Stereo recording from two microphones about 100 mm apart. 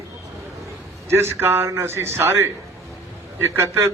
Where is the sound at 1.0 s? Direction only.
25° right (ahead or behind).